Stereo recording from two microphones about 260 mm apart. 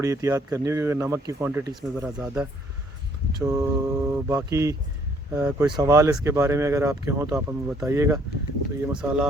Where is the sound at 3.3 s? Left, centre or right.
Centre.